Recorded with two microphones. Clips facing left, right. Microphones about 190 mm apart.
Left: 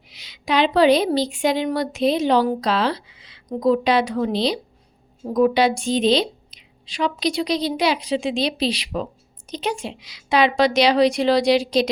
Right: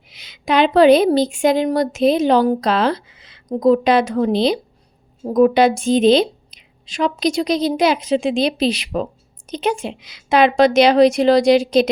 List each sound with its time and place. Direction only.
0.1 s a woman's voice: 50° right (ahead or behind)